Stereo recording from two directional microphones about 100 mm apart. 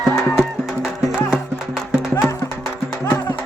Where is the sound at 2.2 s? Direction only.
30° left (ahead or behind).